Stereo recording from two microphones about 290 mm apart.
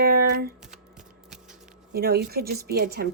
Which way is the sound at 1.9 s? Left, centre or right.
Right.